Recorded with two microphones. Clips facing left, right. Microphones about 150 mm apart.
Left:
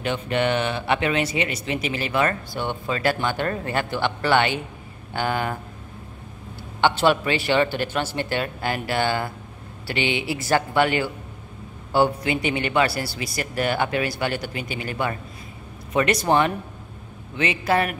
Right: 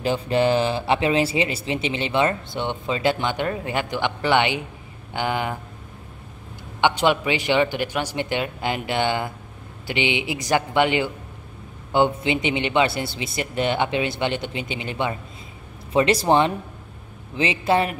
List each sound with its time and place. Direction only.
0.0 s speech: 30° right (ahead or behind); by 5.6 s 15° right (ahead or behind)
6.8 s speech: 15° right (ahead or behind)